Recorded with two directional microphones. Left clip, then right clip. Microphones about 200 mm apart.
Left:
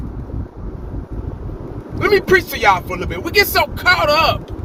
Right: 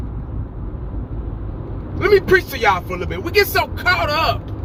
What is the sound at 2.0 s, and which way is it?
Speech, 20° left (ahead or behind).